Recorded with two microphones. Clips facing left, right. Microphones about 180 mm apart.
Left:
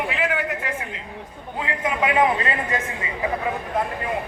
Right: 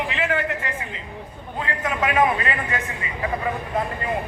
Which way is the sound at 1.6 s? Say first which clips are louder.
Left 1 dB; 15° left (ahead or behind).